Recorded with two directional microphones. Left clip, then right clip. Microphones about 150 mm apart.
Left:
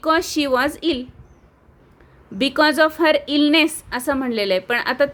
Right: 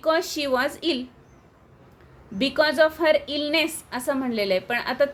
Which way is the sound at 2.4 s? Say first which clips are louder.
Left 4 dB; 45° left (ahead or behind).